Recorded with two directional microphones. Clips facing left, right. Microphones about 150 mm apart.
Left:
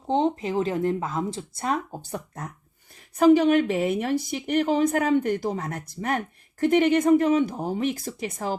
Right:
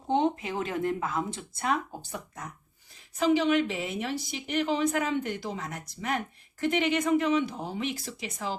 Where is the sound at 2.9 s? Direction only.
55° left (ahead or behind).